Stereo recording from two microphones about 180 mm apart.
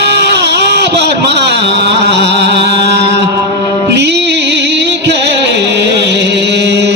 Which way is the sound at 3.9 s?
70° right (ahead or behind).